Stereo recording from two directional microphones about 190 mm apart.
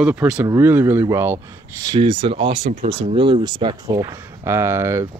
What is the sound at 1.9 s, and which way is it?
Speech, 25° right (ahead or behind).